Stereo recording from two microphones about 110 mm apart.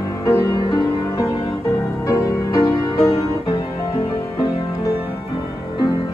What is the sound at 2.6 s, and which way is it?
Music, 40° left (ahead or behind).